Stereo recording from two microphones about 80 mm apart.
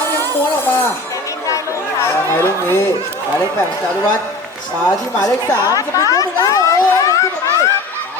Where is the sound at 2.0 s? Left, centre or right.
Left.